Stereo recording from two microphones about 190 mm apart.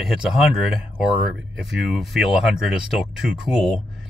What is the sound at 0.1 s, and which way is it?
Speech, 5° right (ahead or behind).